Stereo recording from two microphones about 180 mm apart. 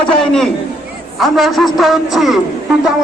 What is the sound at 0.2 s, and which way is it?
A man's voice, 5° left (ahead or behind).